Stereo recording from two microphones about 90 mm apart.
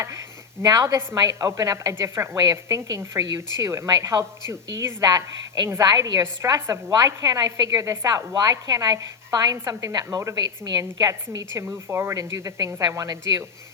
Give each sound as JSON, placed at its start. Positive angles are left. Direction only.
{"t": 0.0, "sound": "a woman's voice", "side_deg": -35}
{"t": 2.3, "sound": "speech", "side_deg": -40}
{"t": 5.0, "sound": "speech", "side_deg": -45}
{"t": 5.8, "sound": "a woman's voice", "side_deg": -50}
{"t": 6.9, "sound": "a woman's voice", "side_deg": -45}